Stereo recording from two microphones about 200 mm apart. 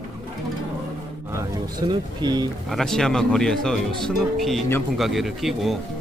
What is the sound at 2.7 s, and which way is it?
Speech, centre (ahead or behind).